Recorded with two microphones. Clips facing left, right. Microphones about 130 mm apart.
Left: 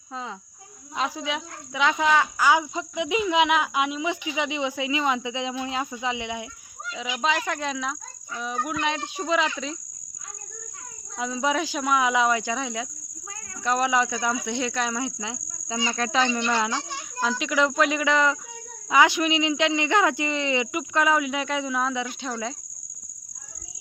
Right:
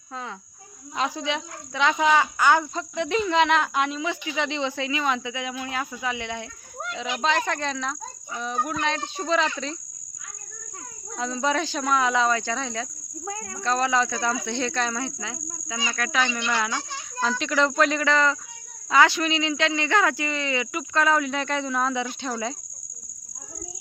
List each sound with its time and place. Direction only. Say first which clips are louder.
0.1 s insect: left 1 dB; 15° left (ahead or behind)
0.9 s speech: right 1 dB; centre (ahead or behind)
11.2 s speech: even; 10° left (ahead or behind)
13.2 s cricket: right 10 dB; 50° right (ahead or behind)
13.6 s speech: even; 15° left (ahead or behind)
15.9 s insect: left 2 dB; 25° left (ahead or behind)
16.9 s speech: even; 10° left (ahead or behind)